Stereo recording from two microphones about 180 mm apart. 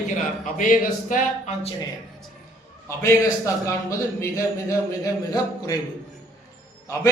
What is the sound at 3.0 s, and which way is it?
A man's voice, 15° left (ahead or behind).